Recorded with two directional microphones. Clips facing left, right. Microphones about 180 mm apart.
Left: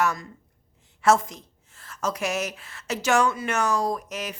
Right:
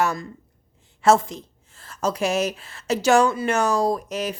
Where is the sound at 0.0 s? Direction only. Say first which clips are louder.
Right 2 dB; 30° right (ahead or behind).